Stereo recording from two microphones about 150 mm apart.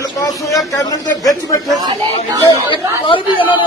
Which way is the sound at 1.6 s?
25° right (ahead or behind).